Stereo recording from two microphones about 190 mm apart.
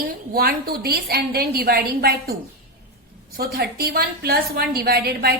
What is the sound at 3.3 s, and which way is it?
A woman's voice, 55° right (ahead or behind).